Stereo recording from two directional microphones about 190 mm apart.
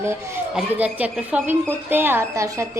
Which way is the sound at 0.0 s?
15° right (ahead or behind).